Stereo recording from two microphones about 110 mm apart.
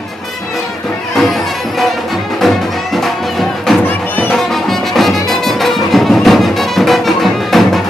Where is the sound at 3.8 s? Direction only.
15° left (ahead or behind).